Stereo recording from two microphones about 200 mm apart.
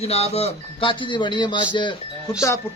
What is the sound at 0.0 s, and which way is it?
Speech, 30° left (ahead or behind).